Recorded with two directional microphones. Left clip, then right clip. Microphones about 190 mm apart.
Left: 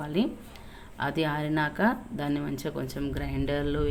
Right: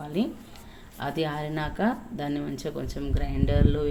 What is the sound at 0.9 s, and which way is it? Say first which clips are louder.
Speech: left 1 dB; 10° left (ahead or behind).